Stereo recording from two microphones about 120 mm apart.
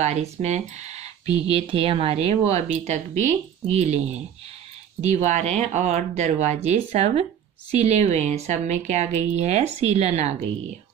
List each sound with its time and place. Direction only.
0.0 s speech: 70° right (ahead or behind)
1.4 s speech: 50° right (ahead or behind)